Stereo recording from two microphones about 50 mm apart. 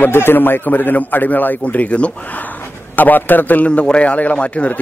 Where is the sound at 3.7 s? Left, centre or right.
Left.